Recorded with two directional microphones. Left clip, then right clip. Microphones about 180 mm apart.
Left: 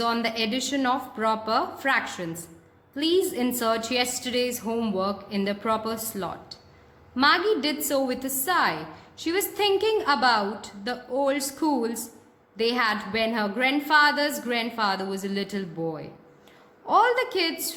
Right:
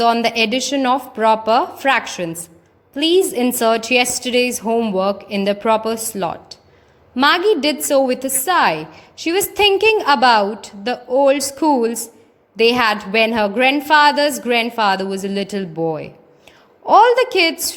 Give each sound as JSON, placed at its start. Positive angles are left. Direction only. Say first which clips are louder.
{"t": 0.0, "sound": "a woman's voice", "louder": "right 11 dB", "side_deg": -35}